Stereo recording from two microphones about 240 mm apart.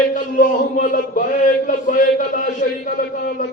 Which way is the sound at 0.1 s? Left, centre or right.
Left.